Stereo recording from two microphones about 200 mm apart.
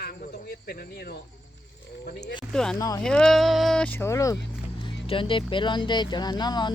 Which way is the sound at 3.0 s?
5° left (ahead or behind).